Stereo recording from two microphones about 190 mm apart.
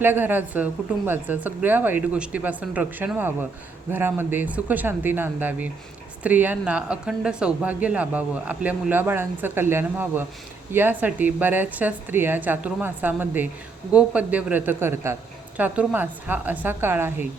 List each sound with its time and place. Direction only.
0.0 s speech: 10° right (ahead or behind)